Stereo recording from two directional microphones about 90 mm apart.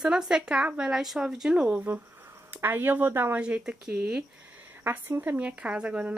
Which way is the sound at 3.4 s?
15° right (ahead or behind).